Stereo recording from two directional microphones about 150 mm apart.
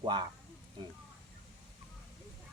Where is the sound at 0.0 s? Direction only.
30° right (ahead or behind).